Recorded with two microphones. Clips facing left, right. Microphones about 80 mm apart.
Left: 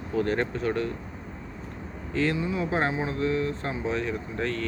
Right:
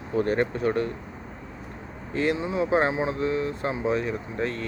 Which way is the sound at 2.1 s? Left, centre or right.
Right.